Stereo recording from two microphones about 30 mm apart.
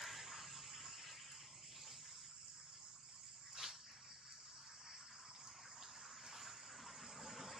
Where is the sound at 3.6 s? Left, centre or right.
Centre.